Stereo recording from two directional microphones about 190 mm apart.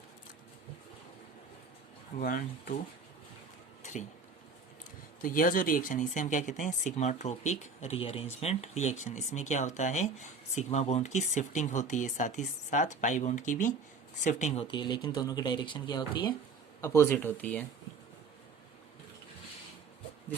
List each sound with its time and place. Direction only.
2.1 s speech: 45° left (ahead or behind)
5.2 s speech: 45° left (ahead or behind); by 17.6 s 10° left (ahead or behind)